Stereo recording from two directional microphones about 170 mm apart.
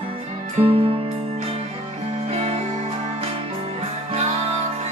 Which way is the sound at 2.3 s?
35° right (ahead or behind).